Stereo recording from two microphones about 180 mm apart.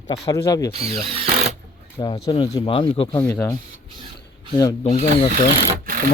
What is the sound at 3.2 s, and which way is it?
Speech, 10° left (ahead or behind).